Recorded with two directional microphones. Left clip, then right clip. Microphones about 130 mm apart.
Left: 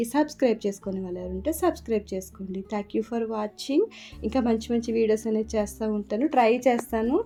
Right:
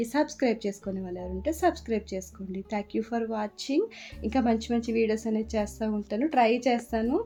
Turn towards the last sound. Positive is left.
turn(degrees=30)  # may be behind; listen again after turning